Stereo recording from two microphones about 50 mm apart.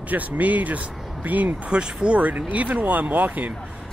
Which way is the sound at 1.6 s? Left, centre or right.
Centre.